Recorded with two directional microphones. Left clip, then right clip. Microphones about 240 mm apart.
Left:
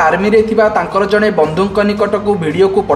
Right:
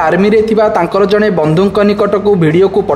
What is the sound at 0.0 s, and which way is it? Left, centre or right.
A woman's voice, right.